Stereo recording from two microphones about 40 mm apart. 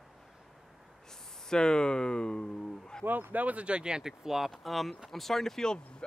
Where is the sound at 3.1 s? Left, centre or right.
Right.